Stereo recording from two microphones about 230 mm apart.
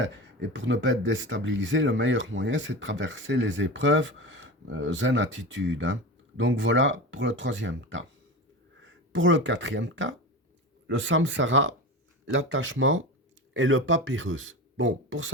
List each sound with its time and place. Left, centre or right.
0.0 s speech: right